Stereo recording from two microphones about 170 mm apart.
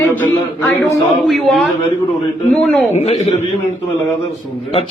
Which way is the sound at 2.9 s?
40° left (ahead or behind).